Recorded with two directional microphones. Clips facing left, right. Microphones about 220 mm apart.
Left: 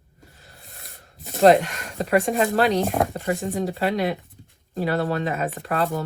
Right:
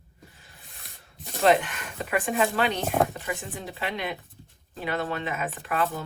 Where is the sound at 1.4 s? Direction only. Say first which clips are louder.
Left 6 dB; 40° left (ahead or behind).